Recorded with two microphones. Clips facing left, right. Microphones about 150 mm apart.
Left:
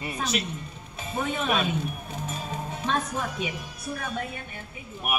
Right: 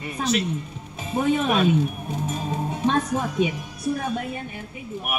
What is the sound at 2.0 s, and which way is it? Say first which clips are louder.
Music: right 6 dB; 20° right (ahead or behind).